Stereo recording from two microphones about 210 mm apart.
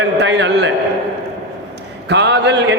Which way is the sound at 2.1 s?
55° right (ahead or behind).